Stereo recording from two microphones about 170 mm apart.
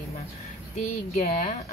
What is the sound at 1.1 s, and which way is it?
Speech, 40° left (ahead or behind).